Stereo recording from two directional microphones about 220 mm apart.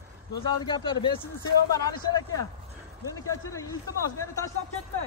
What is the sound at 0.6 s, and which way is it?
Speech, 20° left (ahead or behind).